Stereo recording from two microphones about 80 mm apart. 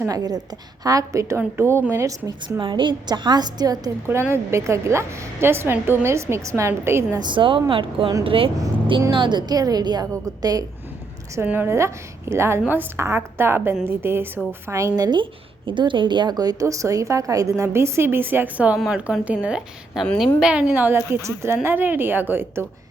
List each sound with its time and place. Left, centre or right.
0.1 s a woman's voice: right
0.9 s a woman's voice: right
1.9 s a woman's voice: right
2.6 s a woman's voice: right
4.0 s a woman's voice: right
7.2 s a woman's voice: right
9.1 s a woman's voice: right
11.4 s a woman's voice: right
14.8 s a woman's voice: right
15.0 s a woman's voice: right
21.1 s a woman's voice: right